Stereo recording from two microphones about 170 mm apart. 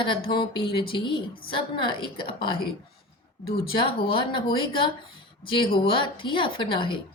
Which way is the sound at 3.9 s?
30° left (ahead or behind).